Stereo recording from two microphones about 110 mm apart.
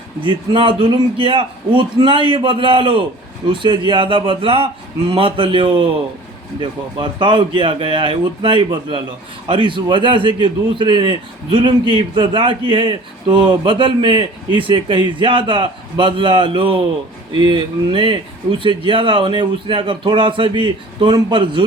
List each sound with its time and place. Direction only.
0.2 s a man's voice: 50° right (ahead or behind)